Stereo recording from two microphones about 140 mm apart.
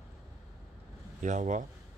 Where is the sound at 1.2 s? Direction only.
60° right (ahead or behind).